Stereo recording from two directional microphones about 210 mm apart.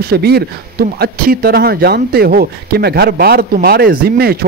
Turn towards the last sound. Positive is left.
turn(degrees=-45)  # may be behind; listen again after turning